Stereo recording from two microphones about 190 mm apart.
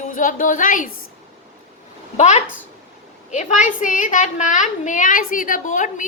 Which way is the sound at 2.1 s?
40° left (ahead or behind).